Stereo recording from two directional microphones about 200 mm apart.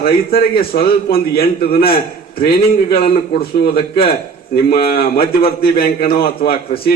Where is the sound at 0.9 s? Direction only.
50° left (ahead or behind).